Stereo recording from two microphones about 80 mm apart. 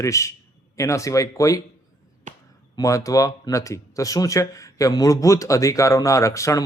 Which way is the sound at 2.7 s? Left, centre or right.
Left.